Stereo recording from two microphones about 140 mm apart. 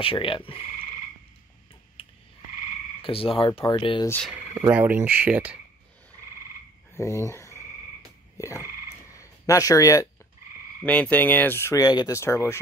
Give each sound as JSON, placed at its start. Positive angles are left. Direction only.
{"t": 0.0, "sound": "speech", "side_deg": 40}
{"t": 2.0, "sound": "frog", "side_deg": 40}
{"t": 3.0, "sound": "speech", "side_deg": 40}
{"t": 4.3, "sound": "speech", "side_deg": -10}
{"t": 6.9, "sound": "a sound", "side_deg": 20}
{"t": 8.4, "sound": "speech", "side_deg": 25}
{"t": 9.1, "sound": "a sound", "side_deg": 25}
{"t": 10.8, "sound": "speech", "side_deg": 10}